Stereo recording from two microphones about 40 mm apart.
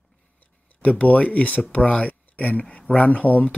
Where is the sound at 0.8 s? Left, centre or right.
Left.